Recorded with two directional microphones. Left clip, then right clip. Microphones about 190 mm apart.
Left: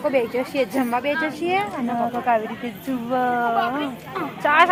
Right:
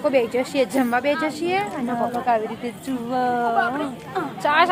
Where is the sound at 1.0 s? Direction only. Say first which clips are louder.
Right 1 dB; 65° right (ahead or behind).